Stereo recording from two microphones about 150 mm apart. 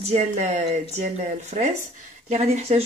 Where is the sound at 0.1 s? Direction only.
50° right (ahead or behind).